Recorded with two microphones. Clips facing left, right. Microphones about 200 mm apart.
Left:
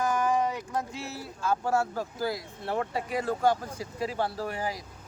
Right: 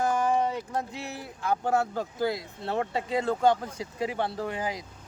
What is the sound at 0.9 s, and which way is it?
Speech, 20° right (ahead or behind).